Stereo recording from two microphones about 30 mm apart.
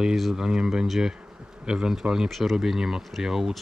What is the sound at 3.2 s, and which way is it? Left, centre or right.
Speech, centre.